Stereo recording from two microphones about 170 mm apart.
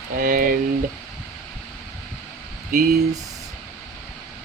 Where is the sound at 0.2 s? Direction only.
55° right (ahead or behind).